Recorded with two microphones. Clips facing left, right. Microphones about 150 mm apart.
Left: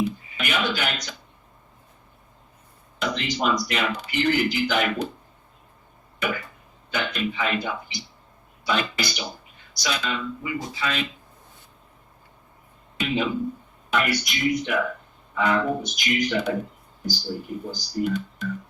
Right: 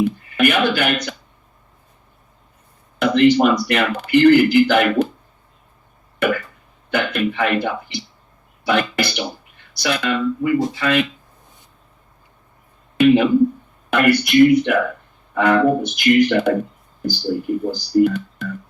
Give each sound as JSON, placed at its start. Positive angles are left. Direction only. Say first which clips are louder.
{"t": 0.3, "sound": "speech", "louder": "right 10 dB", "side_deg": -60}
{"t": 3.0, "sound": "speech", "louder": "right 13 dB", "side_deg": -60}
{"t": 6.1, "sound": "cough", "louder": "right 9 dB", "side_deg": -60}
{"t": 6.9, "sound": "speech", "louder": "right 7 dB", "side_deg": -60}
{"t": 13.0, "sound": "speech", "louder": "right 13 dB", "side_deg": -60}